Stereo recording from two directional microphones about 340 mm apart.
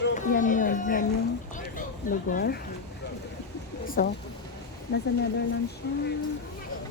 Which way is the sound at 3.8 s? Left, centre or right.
Left.